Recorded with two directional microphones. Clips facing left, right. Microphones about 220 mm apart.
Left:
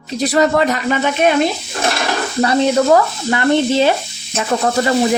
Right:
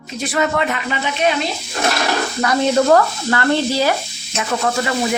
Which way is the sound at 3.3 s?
20° left (ahead or behind).